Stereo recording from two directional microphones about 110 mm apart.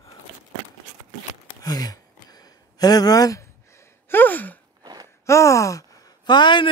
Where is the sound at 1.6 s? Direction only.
35° left (ahead or behind).